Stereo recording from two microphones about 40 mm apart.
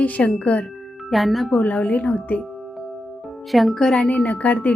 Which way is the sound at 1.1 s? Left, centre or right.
Centre.